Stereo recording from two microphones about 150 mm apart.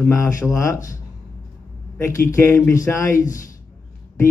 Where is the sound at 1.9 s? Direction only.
15° left (ahead or behind).